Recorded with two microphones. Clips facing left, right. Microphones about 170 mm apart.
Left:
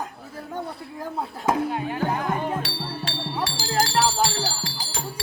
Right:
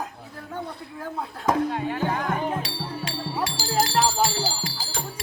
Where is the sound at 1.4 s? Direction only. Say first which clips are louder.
Right 1 dB; 10° left (ahead or behind).